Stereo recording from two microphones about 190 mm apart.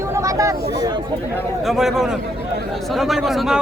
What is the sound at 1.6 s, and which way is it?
Speech, centre (ahead or behind).